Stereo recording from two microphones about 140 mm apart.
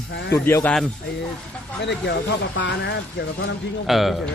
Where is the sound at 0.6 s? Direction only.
5° left (ahead or behind).